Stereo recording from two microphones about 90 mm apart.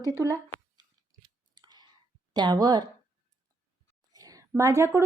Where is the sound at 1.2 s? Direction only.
55° right (ahead or behind).